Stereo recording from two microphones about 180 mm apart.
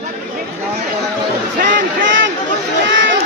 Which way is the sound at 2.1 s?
90° right.